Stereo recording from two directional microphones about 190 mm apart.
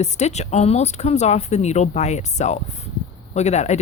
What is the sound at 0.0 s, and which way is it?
Speech, 35° left (ahead or behind).